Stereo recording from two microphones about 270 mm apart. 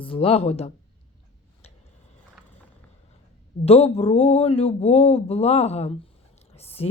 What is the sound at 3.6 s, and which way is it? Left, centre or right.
Speech, left.